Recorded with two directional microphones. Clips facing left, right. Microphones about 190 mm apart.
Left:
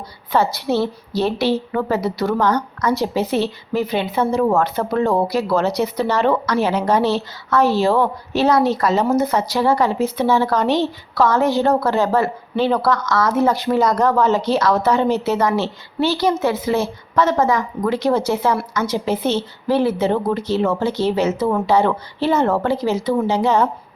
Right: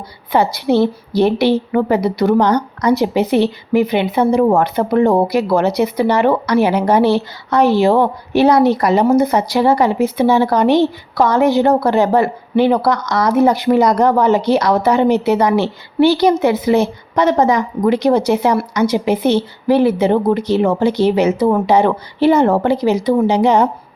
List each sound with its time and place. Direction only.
0.3 s speech: 15° right (ahead or behind)